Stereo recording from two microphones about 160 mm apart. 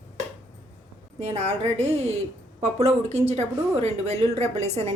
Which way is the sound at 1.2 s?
45° right (ahead or behind).